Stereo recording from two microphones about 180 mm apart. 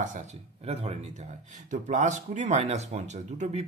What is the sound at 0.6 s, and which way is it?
Speech, 35° right (ahead or behind).